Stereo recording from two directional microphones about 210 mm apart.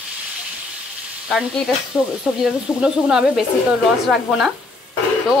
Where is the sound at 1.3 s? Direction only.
Centre (ahead or behind).